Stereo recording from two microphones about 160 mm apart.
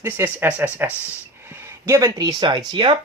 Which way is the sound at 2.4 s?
30° right (ahead or behind).